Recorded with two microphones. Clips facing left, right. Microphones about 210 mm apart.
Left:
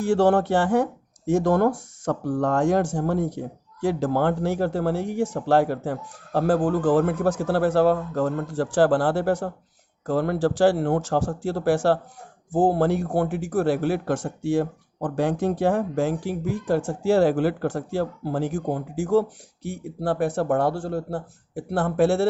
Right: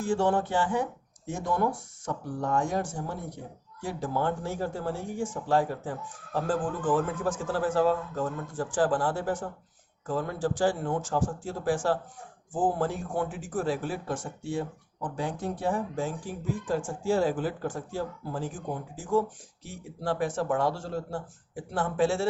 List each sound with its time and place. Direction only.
0.0 s speech: 65° left (ahead or behind)